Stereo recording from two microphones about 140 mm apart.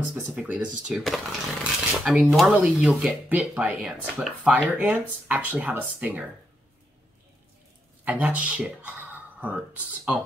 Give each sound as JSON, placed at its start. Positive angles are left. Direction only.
{"t": 0.1, "sound": "speech", "side_deg": -5}
{"t": 8.0, "sound": "speech", "side_deg": -10}